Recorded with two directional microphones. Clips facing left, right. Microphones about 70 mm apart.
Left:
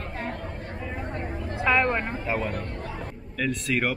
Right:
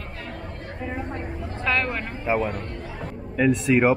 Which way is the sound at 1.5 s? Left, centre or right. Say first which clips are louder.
Left 3 dB; centre.